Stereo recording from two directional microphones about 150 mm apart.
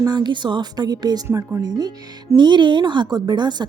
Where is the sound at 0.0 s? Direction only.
30° right (ahead or behind).